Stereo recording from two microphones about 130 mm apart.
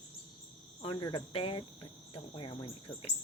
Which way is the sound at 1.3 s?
45° left (ahead or behind).